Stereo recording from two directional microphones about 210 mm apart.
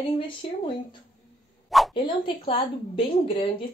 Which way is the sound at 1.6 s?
Centre (ahead or behind).